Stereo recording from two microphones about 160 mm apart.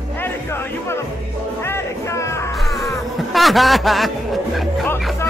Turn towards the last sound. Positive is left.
turn(degrees=0)  # may be behind; listen again after turning